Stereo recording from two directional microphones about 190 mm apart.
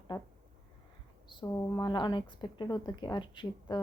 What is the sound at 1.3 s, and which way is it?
A woman's voice, 25° left (ahead or behind).